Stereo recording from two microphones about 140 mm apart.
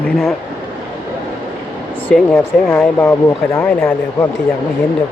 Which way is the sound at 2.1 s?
5° left (ahead or behind).